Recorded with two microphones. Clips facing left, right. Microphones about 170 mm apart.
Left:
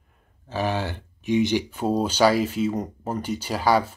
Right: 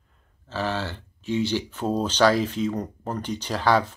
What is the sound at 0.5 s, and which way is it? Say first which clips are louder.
Speech: left 2 dB; 15° left (ahead or behind).